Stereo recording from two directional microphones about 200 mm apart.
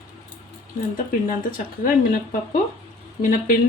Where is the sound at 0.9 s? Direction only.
45° left (ahead or behind).